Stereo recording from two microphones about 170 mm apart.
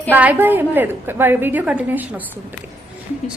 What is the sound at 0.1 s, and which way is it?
A woman's voice, 10° right (ahead or behind).